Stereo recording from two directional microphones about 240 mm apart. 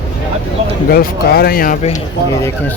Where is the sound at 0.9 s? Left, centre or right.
Left.